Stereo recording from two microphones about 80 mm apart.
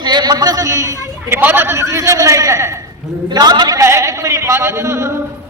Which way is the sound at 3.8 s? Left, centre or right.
Right.